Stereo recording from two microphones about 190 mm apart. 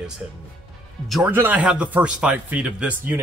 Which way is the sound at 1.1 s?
10° right (ahead or behind).